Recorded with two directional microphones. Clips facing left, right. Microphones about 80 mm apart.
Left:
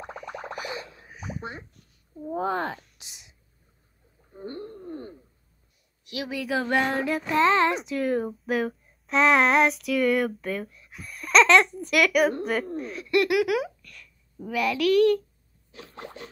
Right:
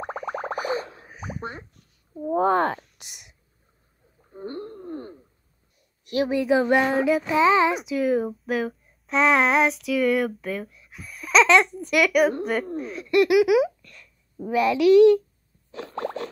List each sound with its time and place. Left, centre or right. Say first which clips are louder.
0.0 s a sound: right 7 dB; right
1.0 s plop: right 2 dB; right
2.2 s speech: right 7 dB; right
4.3 s wild animals: right 3 dB; right
4.8 s a sound: right 2 dB; right
6.0 s speech: right 9 dB; right; by 13.7 s centre
13.8 s a sound: even; right
14.8 s a woman's voice: right 6 dB; centre
15.7 s plop: right 11 dB; right